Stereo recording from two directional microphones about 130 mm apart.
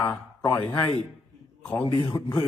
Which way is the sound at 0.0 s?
25° left (ahead or behind).